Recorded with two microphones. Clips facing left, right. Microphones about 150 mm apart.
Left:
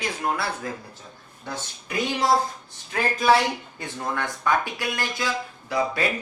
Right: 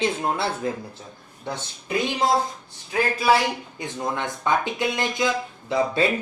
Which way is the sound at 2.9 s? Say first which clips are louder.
Even; 10° right (ahead or behind).